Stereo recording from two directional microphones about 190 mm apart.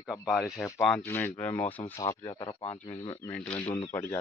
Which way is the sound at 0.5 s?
15° left (ahead or behind).